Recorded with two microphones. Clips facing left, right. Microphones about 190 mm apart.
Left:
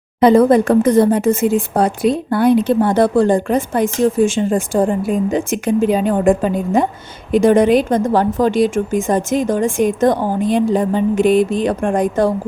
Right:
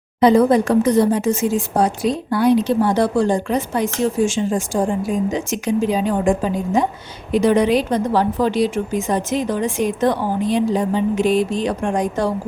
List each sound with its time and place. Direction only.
0.2 s speech: 55° left (ahead or behind)